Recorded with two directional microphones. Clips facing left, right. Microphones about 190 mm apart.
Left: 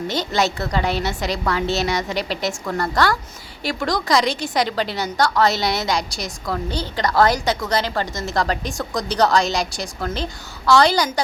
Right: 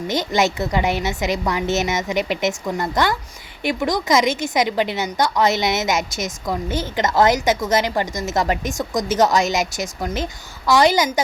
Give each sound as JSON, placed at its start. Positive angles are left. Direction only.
{"t": 0.1, "sound": "a woman's voice", "side_deg": -15}